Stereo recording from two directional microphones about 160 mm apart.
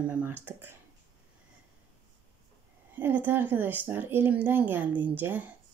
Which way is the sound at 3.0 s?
10° right (ahead or behind).